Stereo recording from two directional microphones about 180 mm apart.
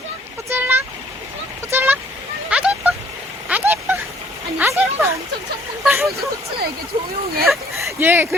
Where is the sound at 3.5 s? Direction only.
10° right (ahead or behind).